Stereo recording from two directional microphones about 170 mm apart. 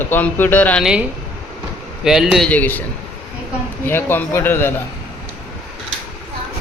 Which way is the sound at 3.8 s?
10° left (ahead or behind).